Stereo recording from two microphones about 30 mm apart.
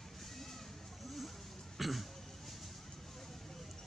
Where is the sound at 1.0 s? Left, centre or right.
Centre.